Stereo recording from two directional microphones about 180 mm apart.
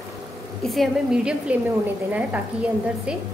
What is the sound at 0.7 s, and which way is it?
A woman's voice, centre (ahead or behind).